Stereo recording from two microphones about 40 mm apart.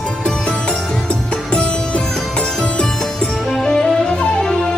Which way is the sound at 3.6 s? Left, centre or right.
Centre.